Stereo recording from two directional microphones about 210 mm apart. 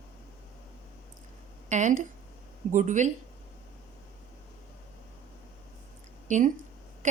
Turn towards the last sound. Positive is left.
turn(degrees=-35)  # may be behind; listen again after turning